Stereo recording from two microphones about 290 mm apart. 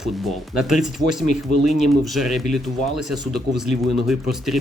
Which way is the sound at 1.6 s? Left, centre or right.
Left.